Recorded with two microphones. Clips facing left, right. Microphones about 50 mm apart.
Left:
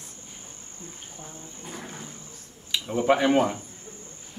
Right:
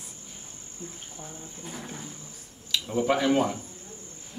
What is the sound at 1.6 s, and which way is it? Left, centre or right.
Speech, centre.